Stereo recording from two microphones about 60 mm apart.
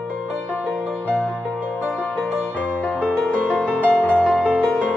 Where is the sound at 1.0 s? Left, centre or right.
Left.